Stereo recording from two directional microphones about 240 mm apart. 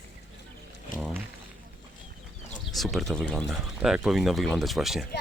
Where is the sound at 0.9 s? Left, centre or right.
Centre.